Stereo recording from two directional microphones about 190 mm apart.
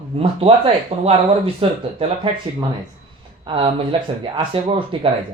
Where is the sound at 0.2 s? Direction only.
30° right (ahead or behind).